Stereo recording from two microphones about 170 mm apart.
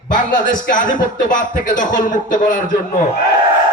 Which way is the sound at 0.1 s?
50° left (ahead or behind).